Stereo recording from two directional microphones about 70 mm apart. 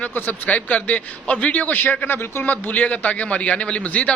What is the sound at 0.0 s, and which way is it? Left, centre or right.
A man's voice, left.